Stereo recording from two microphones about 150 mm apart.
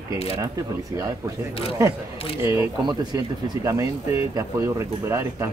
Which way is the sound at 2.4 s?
20° right (ahead or behind).